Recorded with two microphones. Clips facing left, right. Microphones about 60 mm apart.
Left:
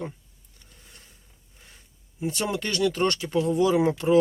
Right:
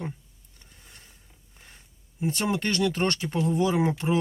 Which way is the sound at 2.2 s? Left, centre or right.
Right.